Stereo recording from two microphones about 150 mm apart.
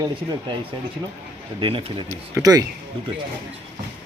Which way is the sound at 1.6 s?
35° right (ahead or behind).